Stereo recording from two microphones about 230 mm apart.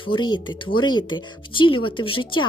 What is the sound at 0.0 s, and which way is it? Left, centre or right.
Speech, centre.